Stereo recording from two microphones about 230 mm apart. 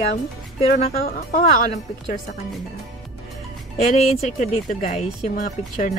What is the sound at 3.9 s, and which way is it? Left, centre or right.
Speech, left.